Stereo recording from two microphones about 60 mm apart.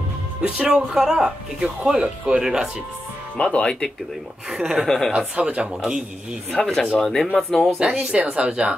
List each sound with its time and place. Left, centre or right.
0.4 s speech: centre
3.3 s speech: centre
4.5 s speech: centre
4.8 s speech: centre
5.1 s speech: right
5.8 s speech: centre
6.5 s speech: centre
7.9 s speech: centre